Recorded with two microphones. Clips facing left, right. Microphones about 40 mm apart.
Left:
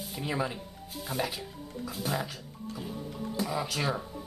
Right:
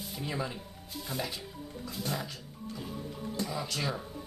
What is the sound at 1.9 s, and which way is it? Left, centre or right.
Speech, centre.